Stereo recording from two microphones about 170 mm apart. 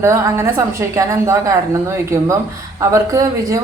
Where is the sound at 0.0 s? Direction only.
15° right (ahead or behind).